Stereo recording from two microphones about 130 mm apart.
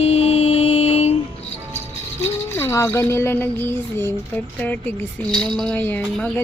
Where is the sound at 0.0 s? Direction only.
55° left (ahead or behind).